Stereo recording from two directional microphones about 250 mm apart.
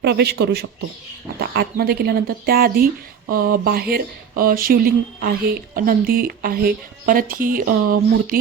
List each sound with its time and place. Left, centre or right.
0.0 s speech: right